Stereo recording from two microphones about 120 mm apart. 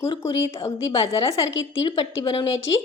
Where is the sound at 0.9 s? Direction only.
50° left (ahead or behind).